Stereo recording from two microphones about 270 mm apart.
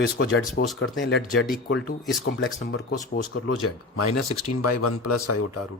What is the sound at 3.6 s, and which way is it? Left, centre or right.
A man's voice, left.